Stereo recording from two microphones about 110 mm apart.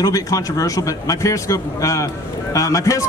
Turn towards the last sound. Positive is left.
turn(degrees=30)  # may be behind; listen again after turning